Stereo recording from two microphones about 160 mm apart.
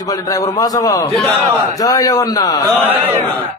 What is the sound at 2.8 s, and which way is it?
Speech, 10° right (ahead or behind).